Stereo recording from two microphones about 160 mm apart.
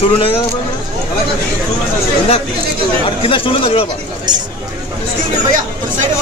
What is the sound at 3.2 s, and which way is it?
Speech, 35° left (ahead or behind).